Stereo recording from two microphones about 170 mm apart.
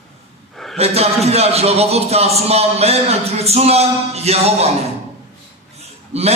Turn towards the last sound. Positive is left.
turn(degrees=-40)  # may be behind; listen again after turning